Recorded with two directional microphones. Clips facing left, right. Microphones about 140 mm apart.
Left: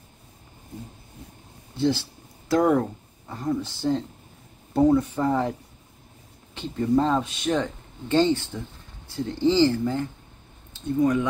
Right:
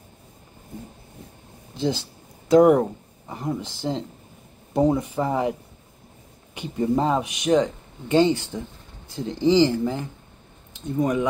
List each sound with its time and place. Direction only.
1.8 s speech: 15° right (ahead or behind)
6.5 s speech: 15° right (ahead or behind)